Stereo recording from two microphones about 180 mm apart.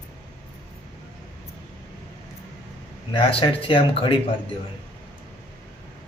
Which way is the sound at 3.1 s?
30° left (ahead or behind).